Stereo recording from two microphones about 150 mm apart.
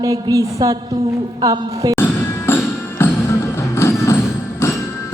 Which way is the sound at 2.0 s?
10° left (ahead or behind).